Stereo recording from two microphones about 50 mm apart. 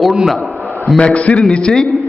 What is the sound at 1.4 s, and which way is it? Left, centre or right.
Speech, centre.